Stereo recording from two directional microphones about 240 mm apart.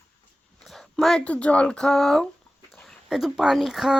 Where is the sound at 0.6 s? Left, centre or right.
Centre.